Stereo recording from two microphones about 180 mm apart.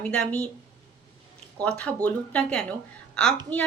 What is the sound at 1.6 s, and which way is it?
A woman's voice, 5° left (ahead or behind).